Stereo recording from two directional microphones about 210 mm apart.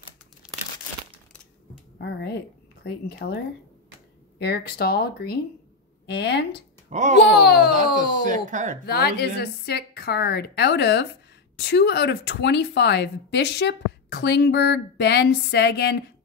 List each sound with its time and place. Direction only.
2.0 s a woman's voice: 50° left (ahead or behind)
4.4 s a woman's voice: 50° left (ahead or behind)
6.9 s speech: 35° right (ahead or behind)
7.4 s a woman's voice: 50° left (ahead or behind)
8.3 s speech: 35° right (ahead or behind)
8.8 s a woman's voice: 50° left (ahead or behind)